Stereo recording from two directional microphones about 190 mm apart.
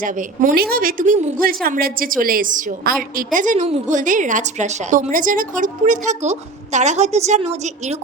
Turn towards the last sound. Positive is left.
turn(degrees=-35)  # may be behind; listen again after turning